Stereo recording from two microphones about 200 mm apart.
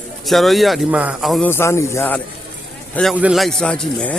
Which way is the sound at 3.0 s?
5° right (ahead or behind).